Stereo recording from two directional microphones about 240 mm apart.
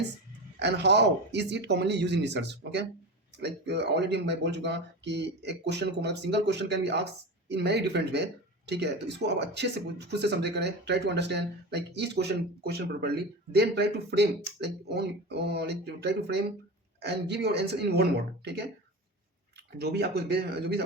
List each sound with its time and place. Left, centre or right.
0.6 s speech: right
19.8 s speech: right